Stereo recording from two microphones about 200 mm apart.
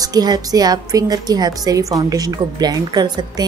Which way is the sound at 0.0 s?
20° right (ahead or behind).